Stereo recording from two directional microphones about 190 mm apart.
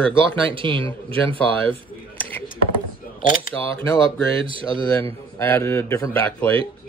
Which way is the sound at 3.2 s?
50° left (ahead or behind).